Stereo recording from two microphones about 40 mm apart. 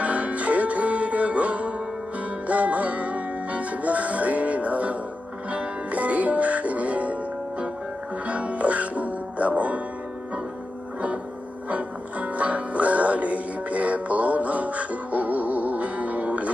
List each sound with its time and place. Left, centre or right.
0.0 s music: right
8.3 s music: right
11.7 s music: right